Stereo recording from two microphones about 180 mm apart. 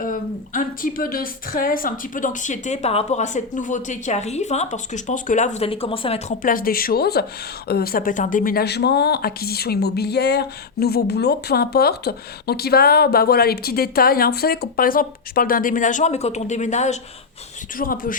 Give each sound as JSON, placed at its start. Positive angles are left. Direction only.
{"t": 0.0, "sound": "a woman's voice", "side_deg": 50}
{"t": 17.7, "sound": "a woman's voice", "side_deg": 50}